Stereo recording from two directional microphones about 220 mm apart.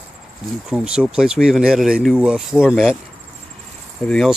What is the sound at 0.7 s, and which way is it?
Speech, 5° right (ahead or behind).